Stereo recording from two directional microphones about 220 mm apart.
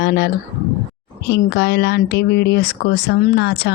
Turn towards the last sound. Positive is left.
turn(degrees=50)  # may be behind; listen again after turning